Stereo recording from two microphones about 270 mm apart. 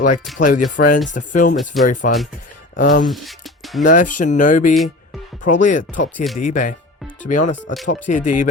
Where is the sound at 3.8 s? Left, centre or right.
Left.